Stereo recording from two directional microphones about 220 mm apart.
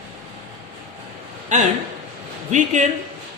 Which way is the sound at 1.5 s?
35° right (ahead or behind).